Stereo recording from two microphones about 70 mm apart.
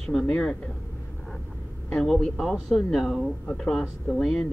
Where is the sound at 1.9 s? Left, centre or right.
Centre.